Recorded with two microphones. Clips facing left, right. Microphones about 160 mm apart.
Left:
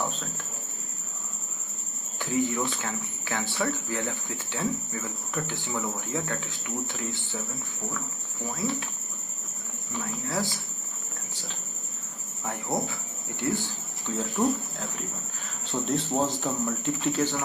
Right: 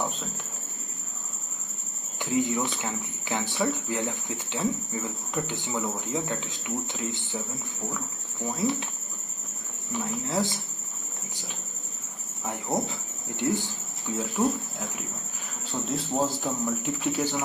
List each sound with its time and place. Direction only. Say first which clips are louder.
0.0 s speech: even; 15° right (ahead or behind)
2.3 s speech: right 1 dB; 20° right (ahead or behind)
8.4 s speech: right 4 dB; 25° right (ahead or behind)
10.0 s speech: right 3 dB; 20° right (ahead or behind)
12.7 s speech: right 2 dB; 20° right (ahead or behind)